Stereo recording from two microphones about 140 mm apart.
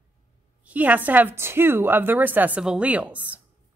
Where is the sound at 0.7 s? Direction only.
10° right (ahead or behind).